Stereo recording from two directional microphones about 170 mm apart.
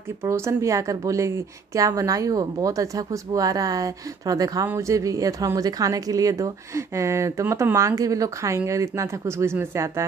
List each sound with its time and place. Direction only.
0.2 s a woman's voice: 15° right (ahead or behind)